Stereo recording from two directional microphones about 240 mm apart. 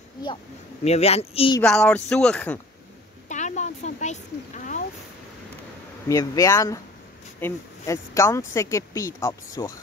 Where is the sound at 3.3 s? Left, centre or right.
Left.